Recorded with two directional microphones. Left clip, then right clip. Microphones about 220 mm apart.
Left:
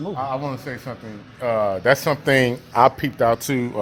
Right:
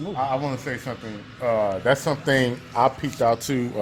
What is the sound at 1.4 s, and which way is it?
Speech, 40° left (ahead or behind).